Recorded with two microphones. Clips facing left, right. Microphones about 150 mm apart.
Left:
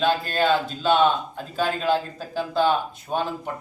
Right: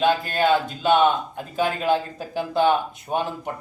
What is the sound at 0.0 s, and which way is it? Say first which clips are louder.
Speech: right 1 dB; 15° right (ahead or behind).